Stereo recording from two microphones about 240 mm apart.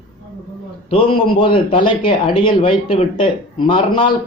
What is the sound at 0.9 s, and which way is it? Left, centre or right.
A man's voice, left.